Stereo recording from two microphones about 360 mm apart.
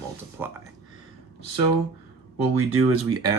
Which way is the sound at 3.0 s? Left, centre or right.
Centre.